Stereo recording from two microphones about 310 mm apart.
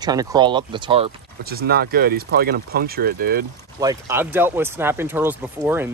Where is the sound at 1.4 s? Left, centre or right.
Right.